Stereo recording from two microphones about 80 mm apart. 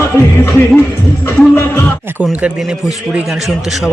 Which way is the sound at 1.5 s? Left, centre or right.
Left.